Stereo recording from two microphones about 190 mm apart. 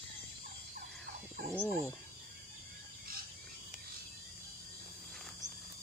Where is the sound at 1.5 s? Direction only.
10° left (ahead or behind).